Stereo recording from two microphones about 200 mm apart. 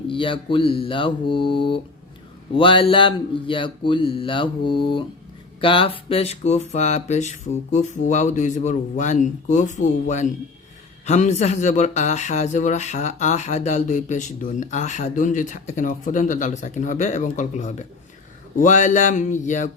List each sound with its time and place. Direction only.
0.1 s speech: 25° left (ahead or behind)